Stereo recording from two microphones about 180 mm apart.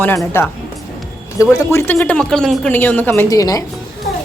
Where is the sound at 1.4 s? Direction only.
15° left (ahead or behind).